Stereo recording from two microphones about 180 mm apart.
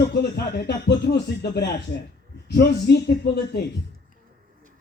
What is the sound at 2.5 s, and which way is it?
Music, 65° left (ahead or behind).